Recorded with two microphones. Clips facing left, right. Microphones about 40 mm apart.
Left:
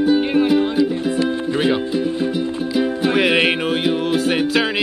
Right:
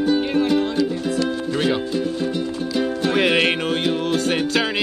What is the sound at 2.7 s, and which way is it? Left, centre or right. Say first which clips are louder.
Music: left 2 dB; centre.